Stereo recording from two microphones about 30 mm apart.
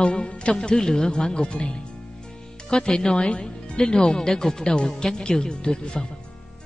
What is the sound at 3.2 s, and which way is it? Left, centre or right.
A woman's voice, left.